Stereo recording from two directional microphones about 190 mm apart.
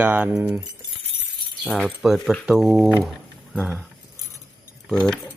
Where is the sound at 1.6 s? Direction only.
Centre (ahead or behind).